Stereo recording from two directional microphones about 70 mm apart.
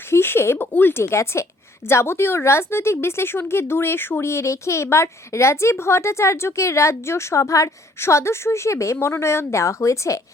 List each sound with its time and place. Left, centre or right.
0.1 s a woman's voice: left